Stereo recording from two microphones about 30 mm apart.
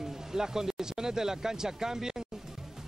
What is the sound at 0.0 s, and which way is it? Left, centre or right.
Speech, centre.